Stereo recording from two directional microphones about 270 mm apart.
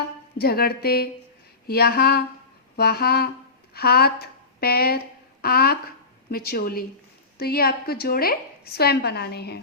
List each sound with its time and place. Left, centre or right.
0.3 s a woman's voice: left